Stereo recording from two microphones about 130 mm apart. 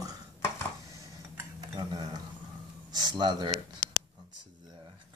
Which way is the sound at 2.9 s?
35° right (ahead or behind).